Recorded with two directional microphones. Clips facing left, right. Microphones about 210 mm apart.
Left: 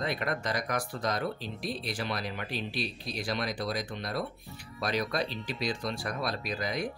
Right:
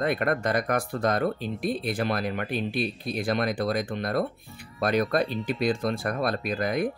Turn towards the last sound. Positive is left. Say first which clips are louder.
# right 7 dB
turn(degrees=-55)  # may be behind; listen again after turning